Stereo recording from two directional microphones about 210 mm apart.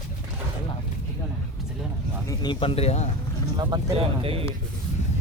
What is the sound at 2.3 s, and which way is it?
Speech, 25° left (ahead or behind).